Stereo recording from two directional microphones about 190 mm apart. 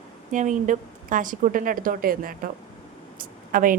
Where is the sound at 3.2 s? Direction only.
45° right (ahead or behind).